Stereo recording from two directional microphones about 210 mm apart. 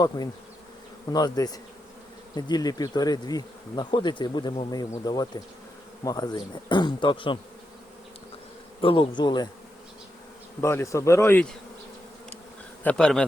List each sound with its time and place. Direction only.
1.1 s bee: 20° left (ahead or behind)
8.8 s bee: 25° left (ahead or behind)
10.6 s speech: 10° left (ahead or behind)
12.8 s bee: 5° left (ahead or behind)